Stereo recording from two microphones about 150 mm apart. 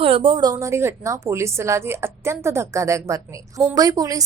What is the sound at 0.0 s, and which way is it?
A woman's voice, 35° right (ahead or behind).